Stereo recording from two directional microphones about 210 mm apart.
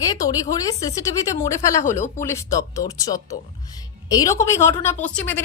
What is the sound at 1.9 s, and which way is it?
Speech, 35° left (ahead or behind).